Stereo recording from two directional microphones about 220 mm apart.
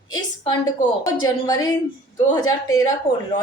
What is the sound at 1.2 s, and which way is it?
Speech, 15° left (ahead or behind).